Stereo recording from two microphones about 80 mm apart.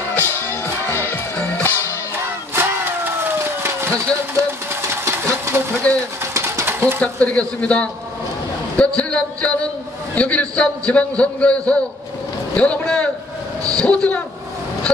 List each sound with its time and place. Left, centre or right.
0.1 s music: left
2.1 s a sound: right
5.9 s pigeon: centre
6.3 s bird: right
7.0 s a man's voice: centre
8.7 s a sound: centre
10.1 s a man's voice: centre